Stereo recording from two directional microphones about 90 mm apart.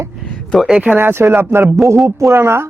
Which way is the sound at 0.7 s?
15° right (ahead or behind).